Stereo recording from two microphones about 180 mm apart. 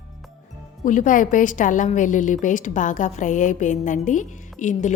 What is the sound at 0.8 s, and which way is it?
A woman's voice, 45° left (ahead or behind).